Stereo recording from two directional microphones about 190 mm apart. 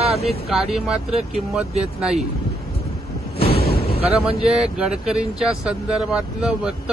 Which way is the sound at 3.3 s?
55° left (ahead or behind).